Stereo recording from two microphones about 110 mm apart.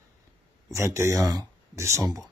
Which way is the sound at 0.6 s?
25° right (ahead or behind).